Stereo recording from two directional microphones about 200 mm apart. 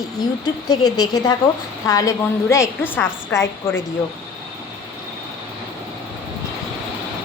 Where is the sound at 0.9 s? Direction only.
20° left (ahead or behind).